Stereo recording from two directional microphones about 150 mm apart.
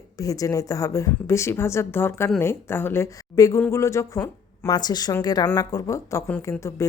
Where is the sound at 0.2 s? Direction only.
20° left (ahead or behind).